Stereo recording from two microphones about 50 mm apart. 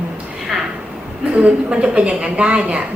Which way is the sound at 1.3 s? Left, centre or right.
Right.